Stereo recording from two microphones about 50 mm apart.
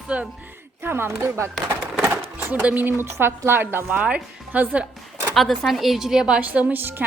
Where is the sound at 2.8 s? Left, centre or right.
Right.